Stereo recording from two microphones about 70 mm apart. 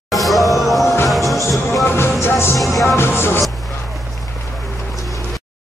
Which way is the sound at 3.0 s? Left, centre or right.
Left.